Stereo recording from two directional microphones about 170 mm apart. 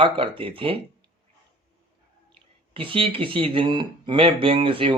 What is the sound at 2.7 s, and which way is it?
Speech, 30° right (ahead or behind).